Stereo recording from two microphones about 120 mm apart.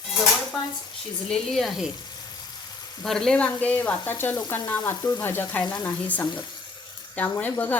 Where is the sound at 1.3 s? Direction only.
Centre (ahead or behind).